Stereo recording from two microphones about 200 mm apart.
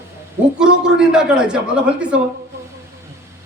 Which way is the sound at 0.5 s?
5° right (ahead or behind).